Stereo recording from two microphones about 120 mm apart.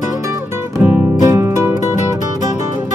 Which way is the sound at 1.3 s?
20° right (ahead or behind).